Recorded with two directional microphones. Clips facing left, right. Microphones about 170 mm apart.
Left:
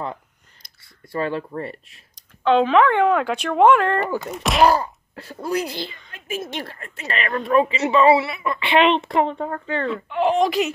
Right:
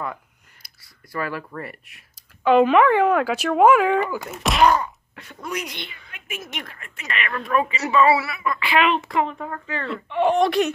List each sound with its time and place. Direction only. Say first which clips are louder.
0.7 s speech: left 3 dB; 25° left (ahead or behind)
2.1 s speech: right 1 dB; 5° right (ahead or behind)
4.6 s a woman's voice: left 1 dB; 35° left (ahead or behind)
9.8 s speech: right 1 dB; centre (ahead or behind)